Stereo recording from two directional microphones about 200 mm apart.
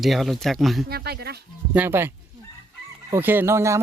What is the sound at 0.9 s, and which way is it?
Speech, 55° right (ahead or behind).